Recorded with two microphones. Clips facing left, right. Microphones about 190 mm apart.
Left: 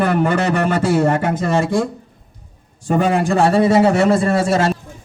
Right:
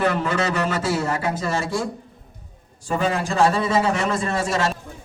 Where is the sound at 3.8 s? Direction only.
35° left (ahead or behind).